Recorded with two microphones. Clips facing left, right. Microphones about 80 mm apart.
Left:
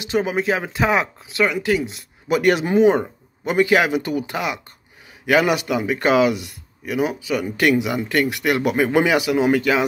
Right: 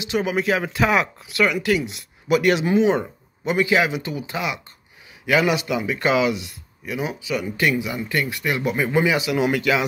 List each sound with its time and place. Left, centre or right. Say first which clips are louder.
0.1 s speech: left 1 dB; left
8.1 s speech: left 4 dB; left
9.3 s speech: left 3 dB; left